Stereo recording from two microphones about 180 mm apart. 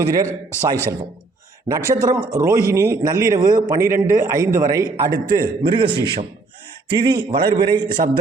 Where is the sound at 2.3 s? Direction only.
15° right (ahead or behind).